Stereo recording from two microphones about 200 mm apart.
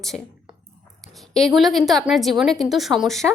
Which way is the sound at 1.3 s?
Centre (ahead or behind).